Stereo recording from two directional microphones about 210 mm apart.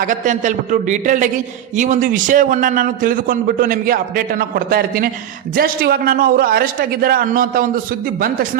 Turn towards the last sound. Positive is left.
turn(degrees=-40)  # may be behind; listen again after turning